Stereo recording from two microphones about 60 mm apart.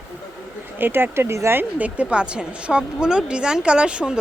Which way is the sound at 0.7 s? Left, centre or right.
Right.